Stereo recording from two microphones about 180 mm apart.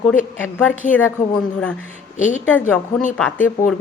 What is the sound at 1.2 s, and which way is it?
Speech, 45° left (ahead or behind).